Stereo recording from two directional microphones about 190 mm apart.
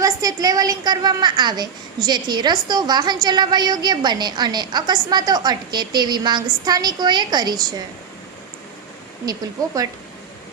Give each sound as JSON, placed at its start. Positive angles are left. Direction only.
{"t": 0.0, "sound": "a child's voice", "side_deg": -20}